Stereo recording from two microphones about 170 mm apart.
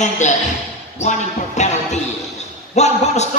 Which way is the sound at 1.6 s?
45° left (ahead or behind).